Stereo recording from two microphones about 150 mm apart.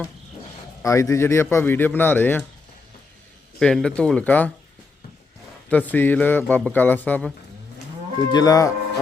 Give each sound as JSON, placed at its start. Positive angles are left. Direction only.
{"t": 0.8, "sound": "a man's voice", "side_deg": 20}
{"t": 3.6, "sound": "a man's voice", "side_deg": 5}
{"t": 5.6, "sound": "a man's voice", "side_deg": 10}
{"t": 8.3, "sound": "speech", "side_deg": 25}